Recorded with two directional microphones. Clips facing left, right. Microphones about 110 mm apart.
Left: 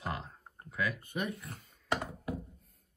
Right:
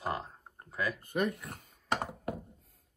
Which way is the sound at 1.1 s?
55° right (ahead or behind).